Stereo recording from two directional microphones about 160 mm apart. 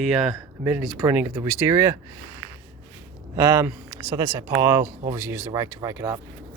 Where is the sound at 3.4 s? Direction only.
15° right (ahead or behind).